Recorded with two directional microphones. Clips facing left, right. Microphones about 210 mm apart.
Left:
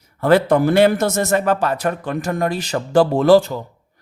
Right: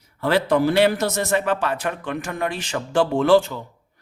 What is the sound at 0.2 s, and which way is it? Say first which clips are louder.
A man's voice: left 5 dB; 45° left (ahead or behind).